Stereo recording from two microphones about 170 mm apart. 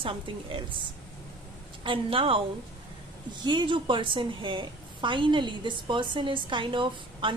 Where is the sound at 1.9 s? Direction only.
30° right (ahead or behind).